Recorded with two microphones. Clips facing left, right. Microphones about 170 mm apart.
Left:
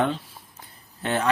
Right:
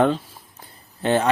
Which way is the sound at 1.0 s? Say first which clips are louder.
Right 6 dB; 30° right (ahead or behind).